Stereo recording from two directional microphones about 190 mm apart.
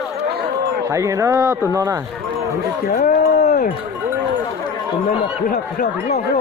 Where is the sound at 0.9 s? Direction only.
15° right (ahead or behind).